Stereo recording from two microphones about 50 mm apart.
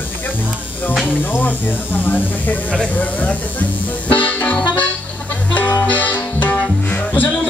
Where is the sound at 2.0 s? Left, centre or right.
Left.